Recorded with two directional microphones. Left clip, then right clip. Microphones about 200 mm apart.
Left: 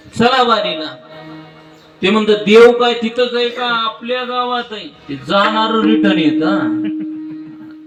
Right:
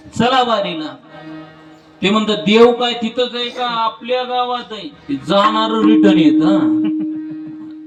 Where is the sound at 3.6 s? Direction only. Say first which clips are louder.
Left 1 dB; 50° right (ahead or behind).